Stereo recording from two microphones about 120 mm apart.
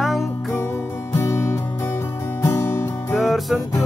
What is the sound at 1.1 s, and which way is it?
Music, 25° left (ahead or behind).